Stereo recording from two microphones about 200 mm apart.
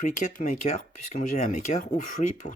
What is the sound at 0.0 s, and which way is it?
Speech, 40° left (ahead or behind).